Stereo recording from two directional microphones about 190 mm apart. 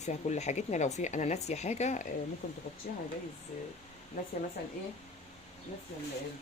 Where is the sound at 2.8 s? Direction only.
50° left (ahead or behind).